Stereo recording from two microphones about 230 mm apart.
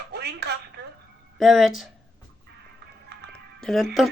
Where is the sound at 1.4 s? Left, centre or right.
Centre.